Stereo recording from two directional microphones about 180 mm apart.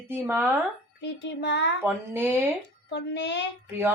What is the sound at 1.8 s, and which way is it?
Speech, 10° right (ahead or behind).